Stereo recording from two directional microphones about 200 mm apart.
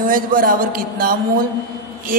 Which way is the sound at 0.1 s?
45° right (ahead or behind).